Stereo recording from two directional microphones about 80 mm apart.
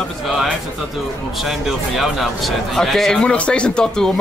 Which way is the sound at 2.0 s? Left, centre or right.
Centre.